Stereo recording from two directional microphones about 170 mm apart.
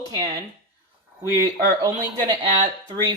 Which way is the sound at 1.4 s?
20° right (ahead or behind).